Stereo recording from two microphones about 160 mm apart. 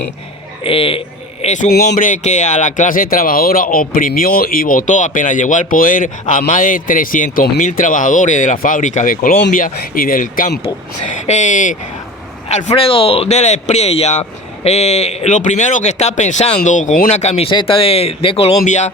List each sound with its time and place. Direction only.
0.6 s speech: 35° left (ahead or behind)
1.7 s speech: 70° left (ahead or behind)
7.6 s a man's voice: 55° left (ahead or behind); by 18.5 s 35° left (ahead or behind)
18.6 s a man's voice: 50° left (ahead or behind)